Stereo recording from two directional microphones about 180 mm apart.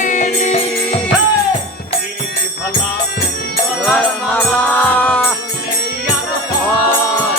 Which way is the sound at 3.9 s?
5° left (ahead or behind).